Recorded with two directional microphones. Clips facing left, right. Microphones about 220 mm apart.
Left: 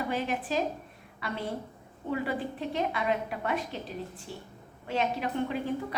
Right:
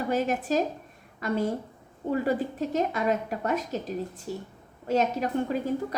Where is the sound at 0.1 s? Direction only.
45° right (ahead or behind).